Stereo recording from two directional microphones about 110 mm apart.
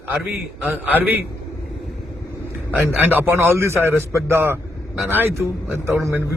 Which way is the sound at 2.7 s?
15° right (ahead or behind).